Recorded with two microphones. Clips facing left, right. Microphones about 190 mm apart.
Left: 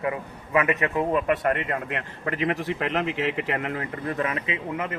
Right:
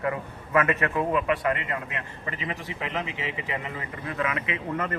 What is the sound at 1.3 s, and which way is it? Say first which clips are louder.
A man's voice: left 2 dB; 55° left (ahead or behind).